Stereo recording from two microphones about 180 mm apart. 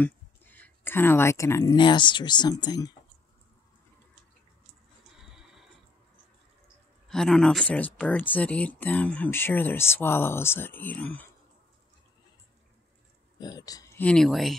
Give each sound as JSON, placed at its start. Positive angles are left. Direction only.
{"t": 0.0, "sound": "speech", "side_deg": 10}
{"t": 5.1, "sound": "neigh", "side_deg": -5}
{"t": 7.1, "sound": "speech", "side_deg": 5}
{"t": 13.4, "sound": "speech", "side_deg": 20}
{"t": 14.0, "sound": "speech", "side_deg": 5}